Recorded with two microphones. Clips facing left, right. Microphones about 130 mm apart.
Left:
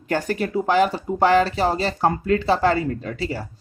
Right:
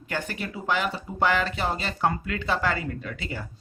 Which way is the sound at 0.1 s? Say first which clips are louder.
Left 9 dB; 40° left (ahead or behind).